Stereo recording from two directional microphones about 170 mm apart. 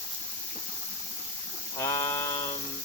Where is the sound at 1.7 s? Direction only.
15° left (ahead or behind).